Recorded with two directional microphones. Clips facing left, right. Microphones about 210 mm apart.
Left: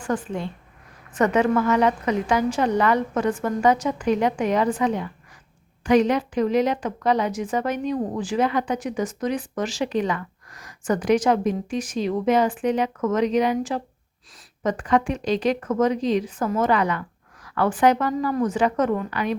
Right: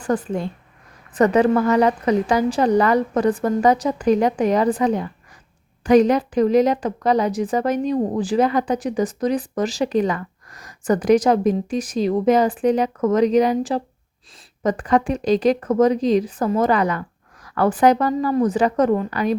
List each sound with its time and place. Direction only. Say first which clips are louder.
0.0 s a woman's voice: right 4 dB; 40° right (ahead or behind)